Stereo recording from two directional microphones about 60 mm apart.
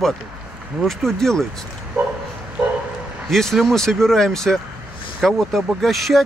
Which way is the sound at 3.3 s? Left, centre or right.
Centre.